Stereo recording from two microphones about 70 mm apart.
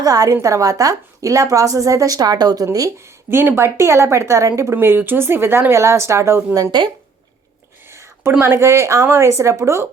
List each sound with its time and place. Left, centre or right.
0.0 s a woman's voice: right
3.0 s a woman's voice: right
6.8 s speech: right
7.9 s a sound: right
8.4 s a woman's voice: right